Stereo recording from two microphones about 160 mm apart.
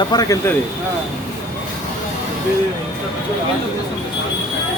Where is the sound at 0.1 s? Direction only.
20° left (ahead or behind).